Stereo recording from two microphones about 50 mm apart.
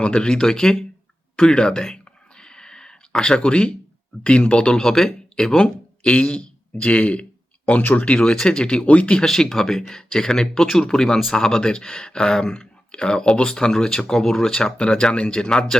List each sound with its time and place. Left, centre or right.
0.0 s speech: centre
2.4 s a sound: centre
4.2 s speech: left
4.8 s speech: centre; by 9.2 s left
9.2 s speech: centre